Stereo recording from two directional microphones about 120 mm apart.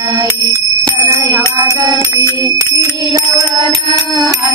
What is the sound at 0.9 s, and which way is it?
Bicycle bell, 25° right (ahead or behind).